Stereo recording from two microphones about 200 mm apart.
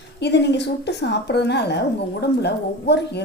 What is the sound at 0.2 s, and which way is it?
A woman's voice, 55° left (ahead or behind).